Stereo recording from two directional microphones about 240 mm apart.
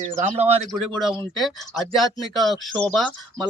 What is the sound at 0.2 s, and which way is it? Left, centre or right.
Speech, right.